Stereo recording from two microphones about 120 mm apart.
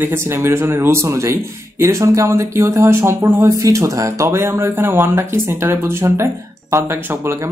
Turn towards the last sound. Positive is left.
turn(degrees=-20)  # may be behind; listen again after turning